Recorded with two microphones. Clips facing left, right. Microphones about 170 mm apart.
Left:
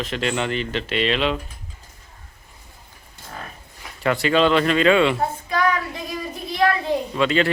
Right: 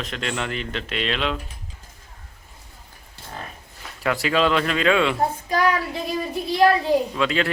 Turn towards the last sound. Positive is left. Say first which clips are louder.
# left 3 dB
turn(degrees=0)  # may be behind; listen again after turning